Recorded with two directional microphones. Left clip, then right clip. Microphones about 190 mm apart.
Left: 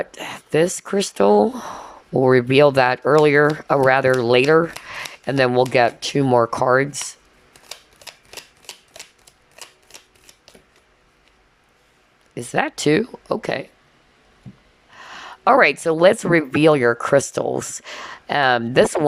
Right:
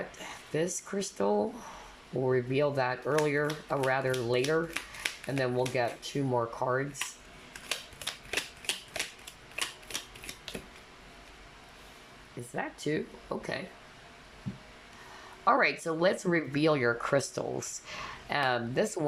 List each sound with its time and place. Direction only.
0.1 s speech: 40° left (ahead or behind)
7.7 s a sound: 25° left (ahead or behind)
12.4 s speech: 55° left (ahead or behind)
15.1 s speech: 45° left (ahead or behind)